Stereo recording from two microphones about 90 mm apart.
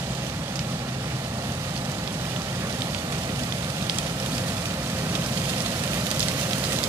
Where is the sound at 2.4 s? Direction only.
30° right (ahead or behind).